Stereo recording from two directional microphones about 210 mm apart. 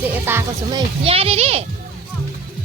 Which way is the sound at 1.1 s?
30° right (ahead or behind).